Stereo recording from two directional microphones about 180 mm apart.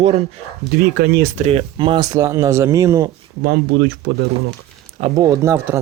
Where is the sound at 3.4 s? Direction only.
70° right (ahead or behind).